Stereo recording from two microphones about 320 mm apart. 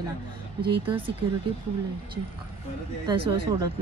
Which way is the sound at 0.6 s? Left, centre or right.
Centre.